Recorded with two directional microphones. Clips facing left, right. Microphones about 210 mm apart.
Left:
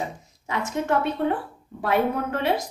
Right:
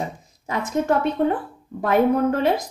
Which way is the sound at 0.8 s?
45° right (ahead or behind).